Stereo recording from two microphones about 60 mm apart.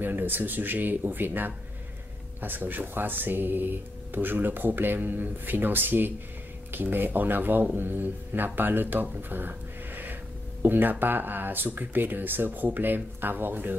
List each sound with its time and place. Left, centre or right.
0.0 s speech: right
9.3 s gasp: right
10.6 s speech: right